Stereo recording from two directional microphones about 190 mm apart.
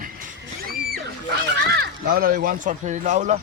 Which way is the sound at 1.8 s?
50° right (ahead or behind).